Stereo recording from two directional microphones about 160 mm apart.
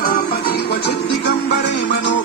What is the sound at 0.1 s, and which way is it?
Music, 70° left (ahead or behind).